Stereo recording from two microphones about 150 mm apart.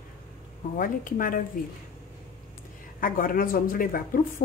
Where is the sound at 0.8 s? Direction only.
65° left (ahead or behind).